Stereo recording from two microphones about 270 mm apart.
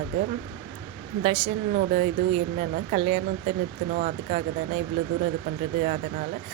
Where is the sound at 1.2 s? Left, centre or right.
Right.